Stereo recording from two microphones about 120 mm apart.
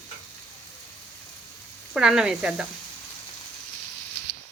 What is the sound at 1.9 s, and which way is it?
Speech, 5° right (ahead or behind).